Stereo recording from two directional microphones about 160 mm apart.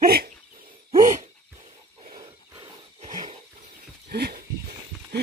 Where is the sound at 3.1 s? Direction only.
45° right (ahead or behind).